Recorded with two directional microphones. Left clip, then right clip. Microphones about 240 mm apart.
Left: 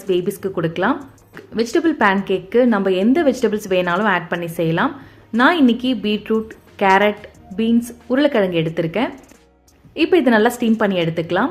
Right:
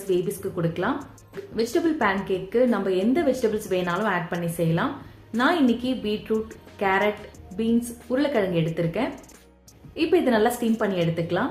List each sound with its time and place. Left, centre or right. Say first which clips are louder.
0.1 s speech: left 6 dB; left
8.1 s speech: left 7 dB; left